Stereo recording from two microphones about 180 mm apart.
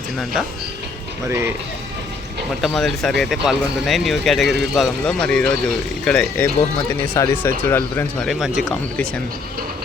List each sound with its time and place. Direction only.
1.3 s speech: 15° right (ahead or behind)
2.6 s speech: centre (ahead or behind)